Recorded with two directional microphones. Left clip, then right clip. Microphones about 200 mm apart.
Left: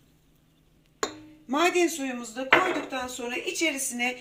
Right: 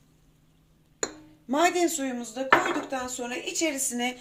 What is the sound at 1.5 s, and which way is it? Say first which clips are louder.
Speech: even; 30° right (ahead or behind).